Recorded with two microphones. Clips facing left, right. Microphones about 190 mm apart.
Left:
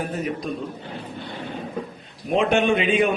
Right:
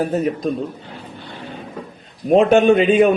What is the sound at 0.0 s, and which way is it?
Speech, 40° right (ahead or behind).